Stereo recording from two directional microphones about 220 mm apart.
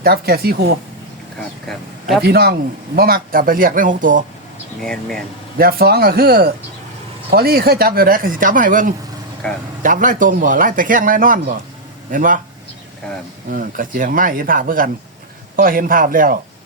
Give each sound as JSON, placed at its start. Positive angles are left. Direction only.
{"t": 0.0, "sound": "speech", "side_deg": -45}
{"t": 1.6, "sound": "speech", "side_deg": 0}
{"t": 2.2, "sound": "speech", "side_deg": -45}
{"t": 4.8, "sound": "speech", "side_deg": 5}
{"t": 5.5, "sound": "speech", "side_deg": -45}
{"t": 9.4, "sound": "speech", "side_deg": 5}
{"t": 9.8, "sound": "speech", "side_deg": -35}
{"t": 13.5, "sound": "speech", "side_deg": -40}